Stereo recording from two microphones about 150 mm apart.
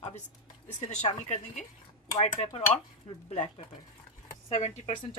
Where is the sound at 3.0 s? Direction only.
45° left (ahead or behind).